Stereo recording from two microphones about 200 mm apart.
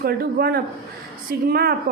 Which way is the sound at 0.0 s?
50° right (ahead or behind).